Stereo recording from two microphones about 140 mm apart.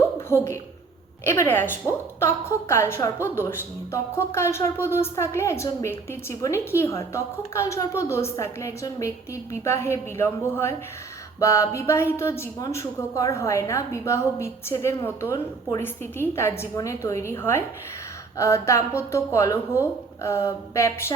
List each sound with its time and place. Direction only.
0.3 s a woman's voice: 20° left (ahead or behind)